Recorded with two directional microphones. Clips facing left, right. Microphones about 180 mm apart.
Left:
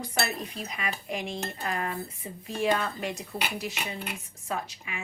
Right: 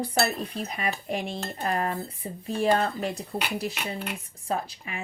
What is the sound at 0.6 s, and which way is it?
A woman's voice, 35° right (ahead or behind).